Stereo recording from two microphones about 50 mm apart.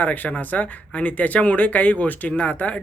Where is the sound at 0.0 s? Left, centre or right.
Left.